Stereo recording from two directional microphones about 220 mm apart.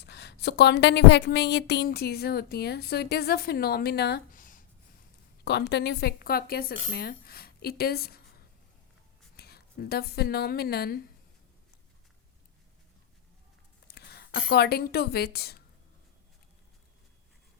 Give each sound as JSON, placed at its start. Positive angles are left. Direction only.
{"t": 0.0, "sound": "a woman's voice", "side_deg": 50}
{"t": 5.5, "sound": "a woman's voice", "side_deg": 50}
{"t": 9.3, "sound": "a woman's voice", "side_deg": 45}
{"t": 13.8, "sound": "speech", "side_deg": 45}